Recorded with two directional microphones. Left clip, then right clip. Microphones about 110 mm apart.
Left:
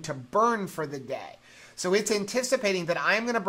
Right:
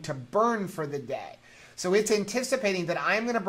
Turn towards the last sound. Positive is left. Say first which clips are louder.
# left 1 dB
turn(degrees=30)  # may be behind; listen again after turning